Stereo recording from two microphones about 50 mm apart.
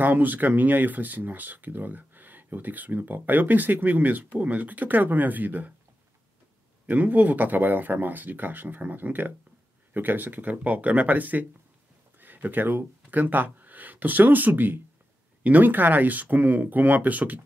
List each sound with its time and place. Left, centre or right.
0.0 s speech: right
6.9 s speech: right